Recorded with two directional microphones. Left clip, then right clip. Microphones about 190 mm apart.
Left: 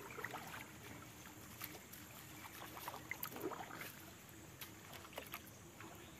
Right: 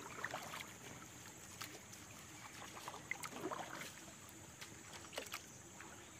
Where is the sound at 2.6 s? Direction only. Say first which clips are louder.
Left 1 dB; centre (ahead or behind).